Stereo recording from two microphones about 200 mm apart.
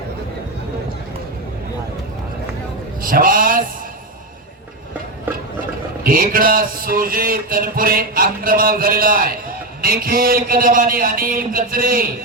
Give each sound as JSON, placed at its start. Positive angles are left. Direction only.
{"t": 3.0, "sound": "a man's voice", "side_deg": -45}
{"t": 6.0, "sound": "a man's voice", "side_deg": -45}